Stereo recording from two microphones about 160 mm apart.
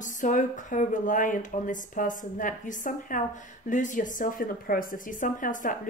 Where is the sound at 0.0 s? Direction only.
55° left (ahead or behind).